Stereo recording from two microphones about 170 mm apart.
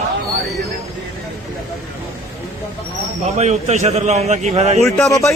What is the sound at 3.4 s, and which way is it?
A man's voice, 40° right (ahead or behind).